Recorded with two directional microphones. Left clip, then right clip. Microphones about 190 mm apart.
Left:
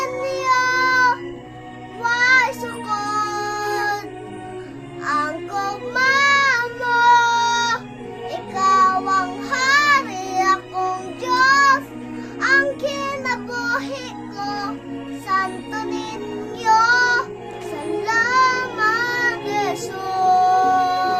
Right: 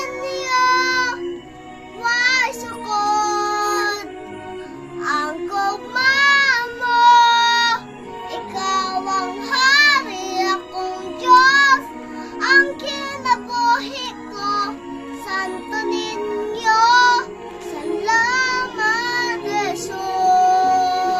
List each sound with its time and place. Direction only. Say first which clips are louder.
0.0 s music: left 3 dB; 15° left (ahead or behind)
5.0 s child singing: even; 15° left (ahead or behind)
12.4 s music: right 2 dB; 15° left (ahead or behind)
15.3 s music: left 3 dB; 15° left (ahead or behind)
18.0 s child singing: left 1 dB; 15° left (ahead or behind)